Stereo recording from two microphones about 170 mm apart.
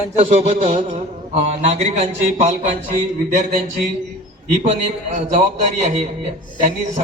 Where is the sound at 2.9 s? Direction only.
50° right (ahead or behind).